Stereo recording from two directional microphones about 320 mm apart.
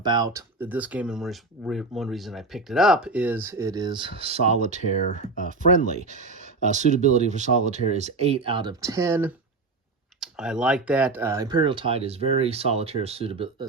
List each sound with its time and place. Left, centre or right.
0.0 s speech: centre
4.9 s speech: left
5.4 s speech: right